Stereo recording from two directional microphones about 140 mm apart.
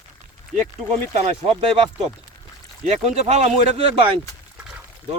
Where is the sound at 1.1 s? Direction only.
45° right (ahead or behind).